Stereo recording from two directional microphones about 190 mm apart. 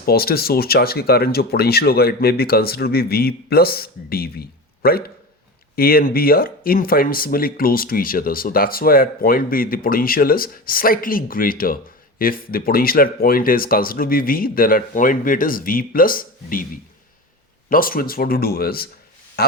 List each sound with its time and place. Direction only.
0.0 s speech: 55° left (ahead or behind)
17.7 s speech: 50° left (ahead or behind)
19.4 s a sound: 55° left (ahead or behind)